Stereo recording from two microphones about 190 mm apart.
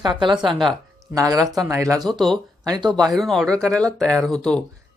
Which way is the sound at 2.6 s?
20° right (ahead or behind).